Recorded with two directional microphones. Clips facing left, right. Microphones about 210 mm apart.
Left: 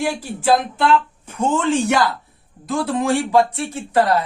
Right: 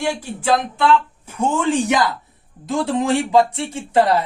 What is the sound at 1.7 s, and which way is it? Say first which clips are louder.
A man's voice: even; 15° right (ahead or behind).